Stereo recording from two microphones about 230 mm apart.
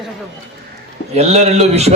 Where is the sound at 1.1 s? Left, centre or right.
Right.